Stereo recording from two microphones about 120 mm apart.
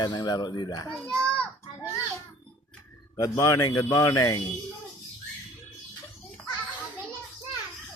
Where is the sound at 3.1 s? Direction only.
30° left (ahead or behind).